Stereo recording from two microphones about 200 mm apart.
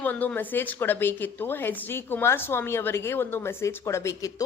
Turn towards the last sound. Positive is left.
turn(degrees=15)  # may be behind; listen again after turning